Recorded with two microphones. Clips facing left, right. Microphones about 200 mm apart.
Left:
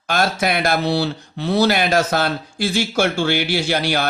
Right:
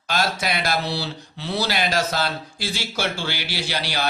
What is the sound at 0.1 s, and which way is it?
Speech, 55° left (ahead or behind).